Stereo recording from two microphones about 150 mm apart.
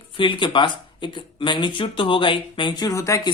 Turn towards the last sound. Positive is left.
turn(degrees=20)  # may be behind; listen again after turning